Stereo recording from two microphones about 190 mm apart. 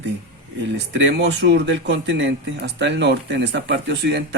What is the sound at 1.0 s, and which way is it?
Speech, 65° right (ahead or behind).